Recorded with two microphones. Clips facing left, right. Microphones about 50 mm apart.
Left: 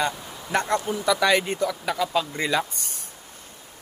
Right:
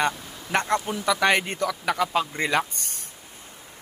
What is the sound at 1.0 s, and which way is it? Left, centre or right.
Speech, right.